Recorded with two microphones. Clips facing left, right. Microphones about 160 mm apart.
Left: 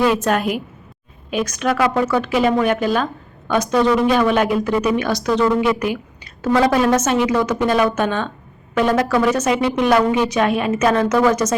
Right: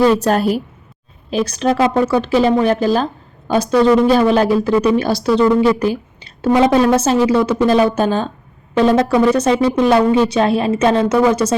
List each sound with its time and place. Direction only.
0.0 s speech: 35° right (ahead or behind)
6.4 s speech: 20° right (ahead or behind)